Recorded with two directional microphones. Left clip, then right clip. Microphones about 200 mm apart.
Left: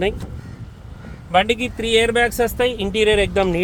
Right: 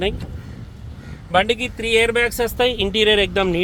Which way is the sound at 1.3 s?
Centre (ahead or behind).